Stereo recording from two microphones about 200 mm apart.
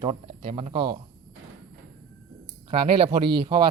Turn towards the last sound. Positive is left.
turn(degrees=-25)  # may be behind; listen again after turning